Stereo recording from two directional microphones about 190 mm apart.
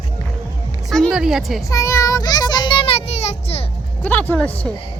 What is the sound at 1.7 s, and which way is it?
A child's voice, 15° left (ahead or behind).